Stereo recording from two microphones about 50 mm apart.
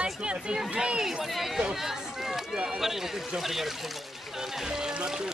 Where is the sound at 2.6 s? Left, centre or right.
Centre.